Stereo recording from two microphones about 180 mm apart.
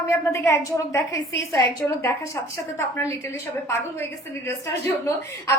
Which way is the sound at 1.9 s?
15° left (ahead or behind).